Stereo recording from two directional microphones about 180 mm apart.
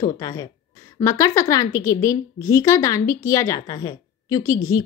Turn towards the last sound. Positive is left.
turn(degrees=20)  # may be behind; listen again after turning